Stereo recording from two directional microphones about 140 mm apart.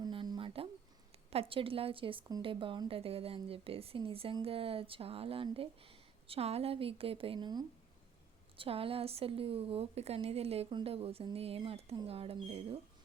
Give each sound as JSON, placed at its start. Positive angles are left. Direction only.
{"t": 0.0, "sound": "a sound", "side_deg": -35}
{"t": 1.3, "sound": "speech", "side_deg": -40}
{"t": 8.5, "sound": "speech", "side_deg": -40}